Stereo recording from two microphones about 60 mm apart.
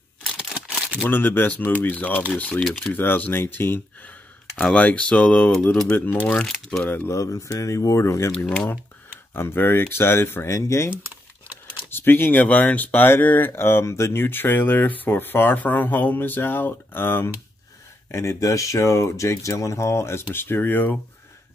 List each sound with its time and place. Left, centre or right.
0.7 s single-lens reflex camera: centre
1.0 s speech: left
2.6 s speech: centre
2.9 s speech: left
6.4 s speech: centre
6.8 s speech: left
7.1 s speech: left
8.5 s speech: left
11.9 s speech: left
18.1 s speech: left
18.4 s speech: left